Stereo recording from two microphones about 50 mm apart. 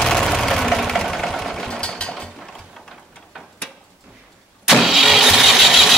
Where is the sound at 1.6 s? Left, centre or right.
Centre.